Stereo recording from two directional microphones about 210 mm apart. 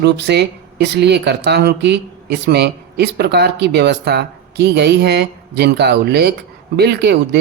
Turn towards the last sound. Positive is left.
turn(degrees=-50)  # may be behind; listen again after turning